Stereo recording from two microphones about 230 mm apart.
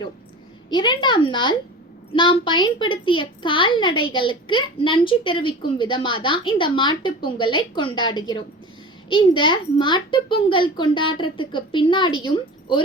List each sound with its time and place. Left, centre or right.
0.7 s a woman's voice: centre